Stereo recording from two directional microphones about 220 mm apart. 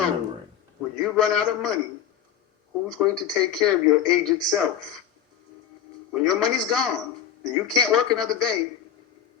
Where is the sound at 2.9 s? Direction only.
Centre (ahead or behind).